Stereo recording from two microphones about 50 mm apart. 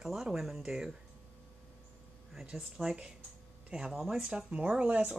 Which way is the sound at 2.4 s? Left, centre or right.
Centre.